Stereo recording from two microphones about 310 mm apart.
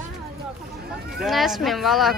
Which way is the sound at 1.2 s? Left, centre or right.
Centre.